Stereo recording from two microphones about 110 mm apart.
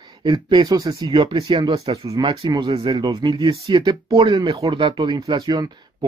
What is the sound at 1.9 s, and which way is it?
Speech, 45° right (ahead or behind).